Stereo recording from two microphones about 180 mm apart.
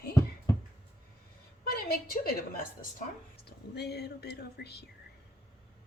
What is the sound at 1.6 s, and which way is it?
Speech, 60° left (ahead or behind).